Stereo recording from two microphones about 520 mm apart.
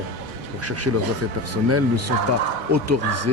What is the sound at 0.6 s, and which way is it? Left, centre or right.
Speech, right.